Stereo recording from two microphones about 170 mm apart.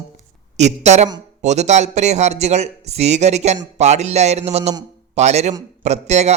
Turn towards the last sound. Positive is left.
turn(degrees=-40)  # may be behind; listen again after turning